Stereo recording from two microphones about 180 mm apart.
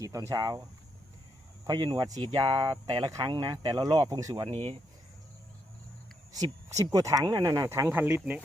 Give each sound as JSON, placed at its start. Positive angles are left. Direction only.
{"t": 0.0, "sound": "speech", "side_deg": -20}
{"t": 1.6, "sound": "speech", "side_deg": -20}
{"t": 4.4, "sound": "speech", "side_deg": -30}
{"t": 6.7, "sound": "speech", "side_deg": -20}